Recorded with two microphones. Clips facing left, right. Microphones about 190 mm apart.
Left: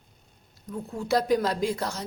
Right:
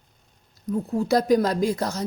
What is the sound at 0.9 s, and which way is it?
A woman's voice, 40° right (ahead or behind).